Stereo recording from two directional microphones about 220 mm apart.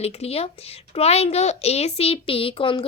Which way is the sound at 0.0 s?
25° left (ahead or behind).